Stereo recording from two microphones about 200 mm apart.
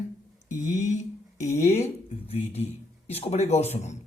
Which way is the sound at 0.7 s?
35° left (ahead or behind).